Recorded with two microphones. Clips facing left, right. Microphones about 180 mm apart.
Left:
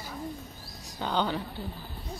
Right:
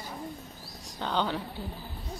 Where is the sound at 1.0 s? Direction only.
5° left (ahead or behind).